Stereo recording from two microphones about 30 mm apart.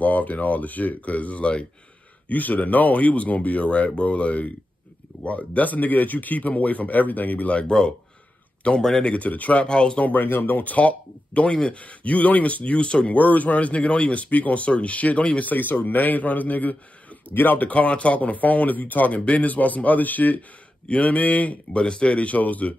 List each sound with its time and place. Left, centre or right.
0.0 s speech: left
2.2 s speech: left
7.4 s speech: left
9.1 s speech: left
9.7 s speech: left
10.0 s speech: left
12.7 s speech: left
13.1 s speech: left
15.5 s speech: left
19.2 s speech: left
20.9 s speech: left
21.7 s speech: left
22.1 s speech: left